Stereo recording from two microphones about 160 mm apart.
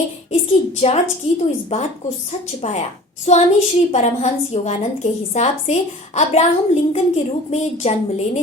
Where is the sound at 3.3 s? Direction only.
45° left (ahead or behind).